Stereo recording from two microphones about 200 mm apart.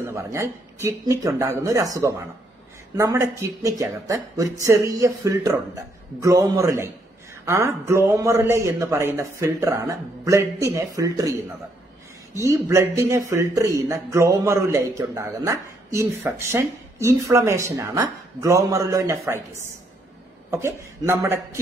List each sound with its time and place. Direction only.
0.0 s speech: 15° right (ahead or behind)
12.4 s speech: 15° right (ahead or behind)